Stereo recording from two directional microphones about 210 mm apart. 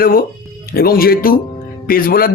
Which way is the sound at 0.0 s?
45° left (ahead or behind).